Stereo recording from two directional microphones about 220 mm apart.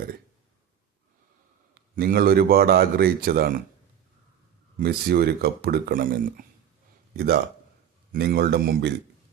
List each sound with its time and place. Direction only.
1.7 s a man's voice: 40° right (ahead or behind)
4.8 s a man's voice: 45° right (ahead or behind)
8.1 s a man's voice: 45° right (ahead or behind)